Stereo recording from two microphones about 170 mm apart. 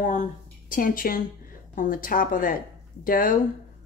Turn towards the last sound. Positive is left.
turn(degrees=55)  # may be behind; listen again after turning